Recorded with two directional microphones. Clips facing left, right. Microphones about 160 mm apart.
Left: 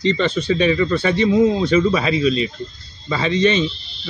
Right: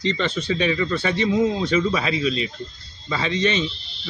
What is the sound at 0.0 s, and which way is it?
Speech, 40° left (ahead or behind).